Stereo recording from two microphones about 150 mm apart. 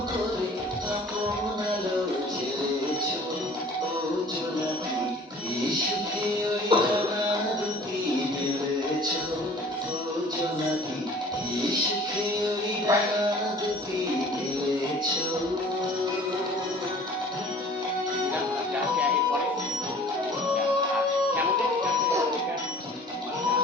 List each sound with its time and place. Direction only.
6.7 s music: 35° right (ahead or behind)
12.9 s music: 20° right (ahead or behind)